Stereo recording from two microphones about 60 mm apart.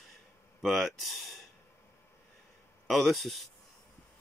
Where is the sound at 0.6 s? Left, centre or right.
Centre.